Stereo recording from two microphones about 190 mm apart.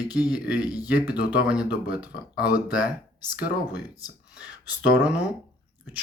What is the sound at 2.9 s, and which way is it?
Speech, 20° left (ahead or behind).